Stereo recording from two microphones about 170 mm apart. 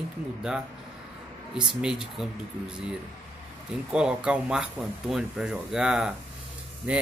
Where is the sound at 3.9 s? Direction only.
5° right (ahead or behind).